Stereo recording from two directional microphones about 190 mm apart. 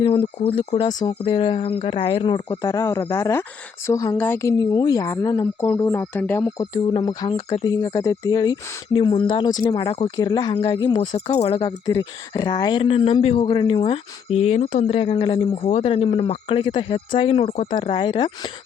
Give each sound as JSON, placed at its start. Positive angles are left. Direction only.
{"t": 0.0, "sound": "speech", "side_deg": 30}